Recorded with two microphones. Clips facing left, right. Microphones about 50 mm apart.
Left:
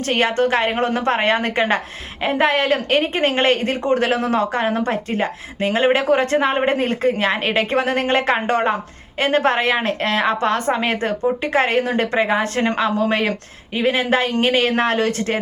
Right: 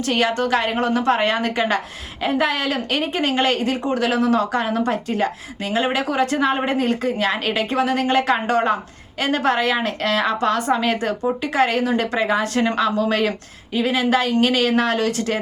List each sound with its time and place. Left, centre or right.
0.0 s speech: left